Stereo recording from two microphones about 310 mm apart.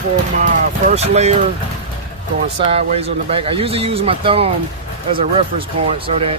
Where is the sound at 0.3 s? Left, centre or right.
Right.